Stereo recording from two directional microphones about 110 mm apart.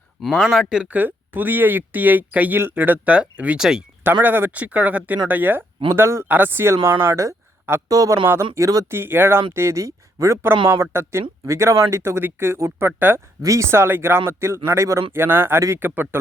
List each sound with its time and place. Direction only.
0.2 s speech: centre (ahead or behind)
4.0 s speech: 15° right (ahead or behind)